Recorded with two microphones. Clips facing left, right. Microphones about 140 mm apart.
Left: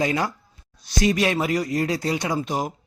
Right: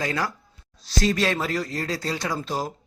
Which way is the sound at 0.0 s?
20° left (ahead or behind).